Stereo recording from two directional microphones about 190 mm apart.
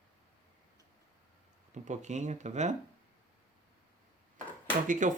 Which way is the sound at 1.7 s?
40° right (ahead or behind).